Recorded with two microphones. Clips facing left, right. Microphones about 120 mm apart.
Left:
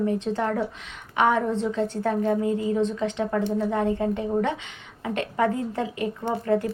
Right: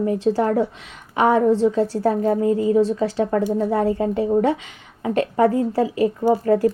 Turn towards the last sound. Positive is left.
turn(degrees=-35)  # may be behind; listen again after turning